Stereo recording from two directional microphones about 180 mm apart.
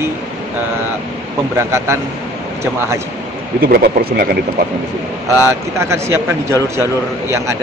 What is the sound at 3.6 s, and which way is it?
Speech, 55° right (ahead or behind).